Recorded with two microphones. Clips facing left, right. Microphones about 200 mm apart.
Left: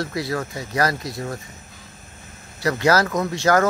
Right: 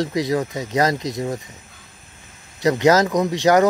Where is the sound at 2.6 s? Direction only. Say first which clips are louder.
Right 4 dB; 20° right (ahead or behind).